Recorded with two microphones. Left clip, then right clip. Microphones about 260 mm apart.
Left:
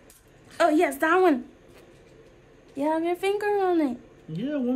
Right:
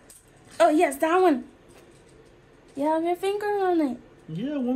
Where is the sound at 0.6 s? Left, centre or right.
Centre.